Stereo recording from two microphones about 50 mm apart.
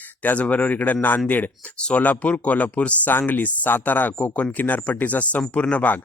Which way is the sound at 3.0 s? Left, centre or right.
Left.